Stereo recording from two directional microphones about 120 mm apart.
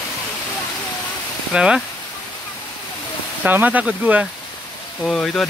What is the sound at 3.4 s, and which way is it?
Speech, 15° right (ahead or behind).